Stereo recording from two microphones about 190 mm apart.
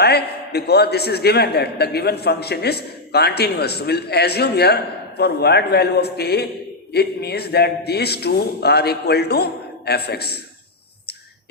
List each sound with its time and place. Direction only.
0.0 s a man's voice: 60° left (ahead or behind)